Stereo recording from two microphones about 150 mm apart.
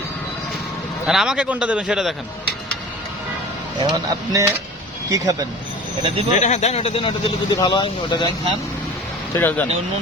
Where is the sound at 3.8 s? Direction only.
25° right (ahead or behind).